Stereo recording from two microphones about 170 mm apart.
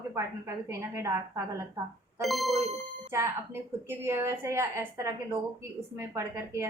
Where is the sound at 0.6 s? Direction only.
15° right (ahead or behind).